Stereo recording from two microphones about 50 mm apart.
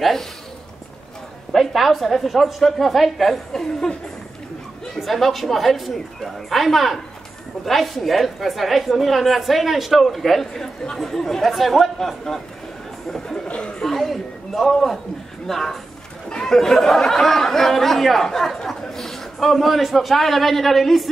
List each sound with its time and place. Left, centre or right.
1.5 s a woman's voice: centre
4.9 s a woman's voice: centre
13.5 s a sound: centre
13.8 s a sound: centre
15.4 s speech: centre
16.3 s chatter: centre
16.5 s a woman's voice: centre